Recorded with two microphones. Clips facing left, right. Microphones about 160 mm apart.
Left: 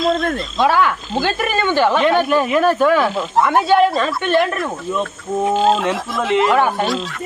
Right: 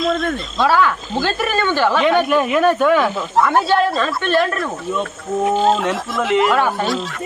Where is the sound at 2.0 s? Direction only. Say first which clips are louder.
Even; centre (ahead or behind).